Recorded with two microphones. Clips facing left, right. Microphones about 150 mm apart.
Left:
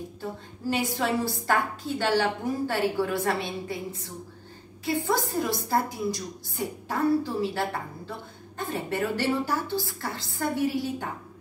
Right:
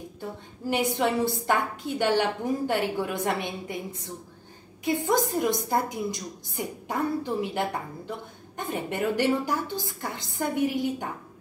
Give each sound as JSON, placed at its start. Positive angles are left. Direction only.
{"t": 0.7, "sound": "a woman's voice", "side_deg": -20}
{"t": 4.8, "sound": "a woman's voice", "side_deg": -20}